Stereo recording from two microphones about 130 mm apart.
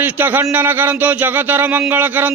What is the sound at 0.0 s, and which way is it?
A man's voice, 15° right (ahead or behind).